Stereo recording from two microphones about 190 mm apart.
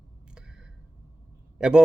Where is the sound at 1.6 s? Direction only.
5° right (ahead or behind).